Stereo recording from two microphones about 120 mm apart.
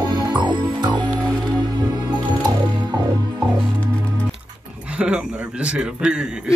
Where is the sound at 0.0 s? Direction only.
35° right (ahead or behind).